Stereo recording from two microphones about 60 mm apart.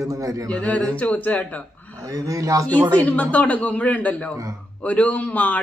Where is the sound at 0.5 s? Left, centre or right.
Left.